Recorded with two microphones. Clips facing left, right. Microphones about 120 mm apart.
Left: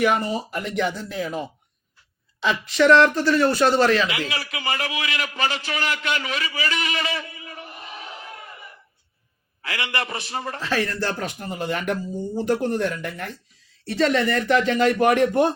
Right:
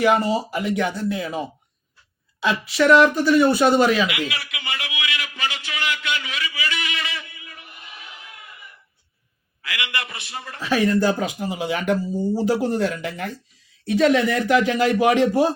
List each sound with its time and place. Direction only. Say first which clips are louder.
0.3 s speech: right 3 dB; 5° right (ahead or behind)
4.1 s a sound: even; 30° left (ahead or behind)
9.6 s a man's voice: left 2 dB; 35° left (ahead or behind)
10.6 s speech: right 7 dB; 15° right (ahead or behind)